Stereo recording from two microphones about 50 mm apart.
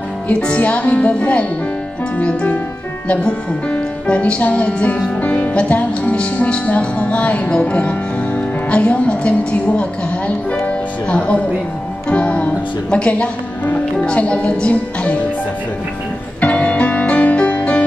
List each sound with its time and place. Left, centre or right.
0.3 s music: left
3.1 s speech: left
6.1 s music: left
8.4 s speech: left
12.1 s music: left
16.3 s music: left